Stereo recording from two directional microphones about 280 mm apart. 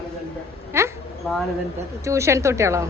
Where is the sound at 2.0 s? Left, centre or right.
Centre.